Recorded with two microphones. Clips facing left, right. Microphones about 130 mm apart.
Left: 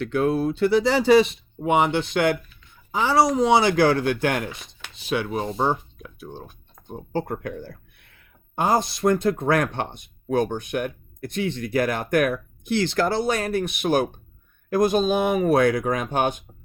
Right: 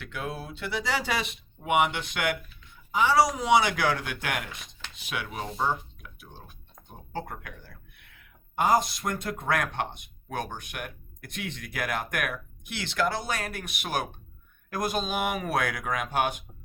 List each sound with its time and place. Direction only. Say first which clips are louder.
0.0 s speech: left 14 dB; 45° left (ahead or behind); by 16.3 s 30° left (ahead or behind)